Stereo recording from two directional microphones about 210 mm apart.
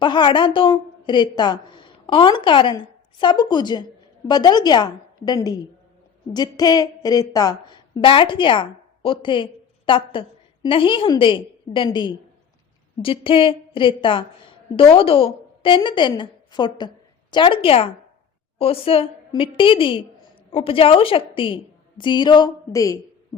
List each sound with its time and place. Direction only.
0.0 s a woman's voice: 20° left (ahead or behind)